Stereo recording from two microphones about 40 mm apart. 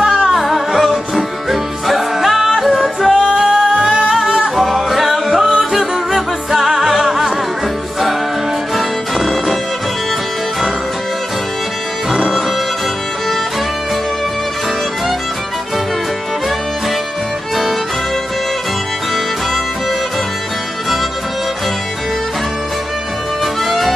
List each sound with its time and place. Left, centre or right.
0.3 s music: centre
3.1 s music: centre
3.3 s music: centre
8.7 s music: centre
23.4 s music: centre